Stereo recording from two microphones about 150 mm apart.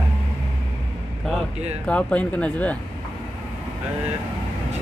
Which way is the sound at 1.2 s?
5° left (ahead or behind).